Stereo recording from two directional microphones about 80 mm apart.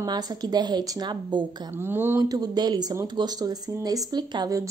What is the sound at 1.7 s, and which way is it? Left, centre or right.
Speech, right.